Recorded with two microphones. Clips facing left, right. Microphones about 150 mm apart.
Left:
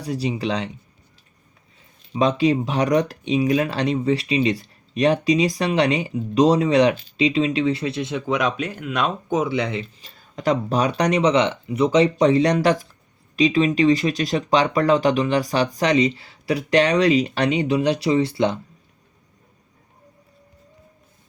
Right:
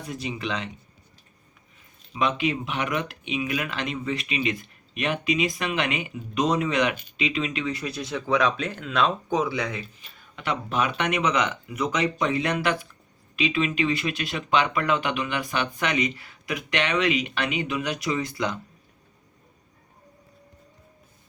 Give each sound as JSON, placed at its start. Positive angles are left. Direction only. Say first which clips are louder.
{"t": 0.0, "sound": "speech", "louder": "left 7 dB", "side_deg": 35}
{"t": 2.1, "sound": "speech", "louder": "left 7 dB", "side_deg": 35}
{"t": 10.3, "sound": "speech", "louder": "left 7 dB", "side_deg": 40}